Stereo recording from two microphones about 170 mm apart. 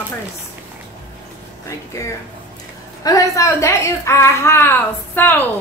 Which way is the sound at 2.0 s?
20° left (ahead or behind).